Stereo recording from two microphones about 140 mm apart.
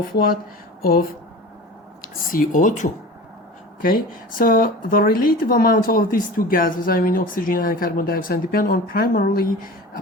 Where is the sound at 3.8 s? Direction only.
90° left.